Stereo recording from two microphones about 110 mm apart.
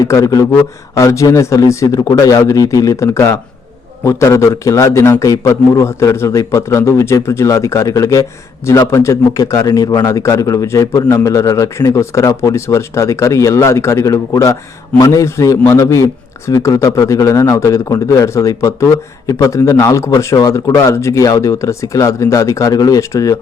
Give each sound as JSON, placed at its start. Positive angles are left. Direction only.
{"t": 0.0, "sound": "a man's voice", "side_deg": 30}